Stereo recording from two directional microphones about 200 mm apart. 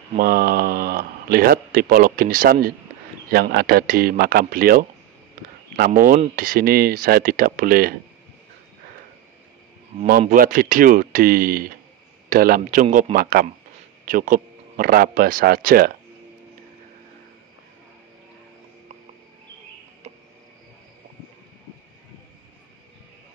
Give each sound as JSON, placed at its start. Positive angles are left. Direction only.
{"t": 0.2, "sound": "speech", "side_deg": -45}
{"t": 10.0, "sound": "speech", "side_deg": -45}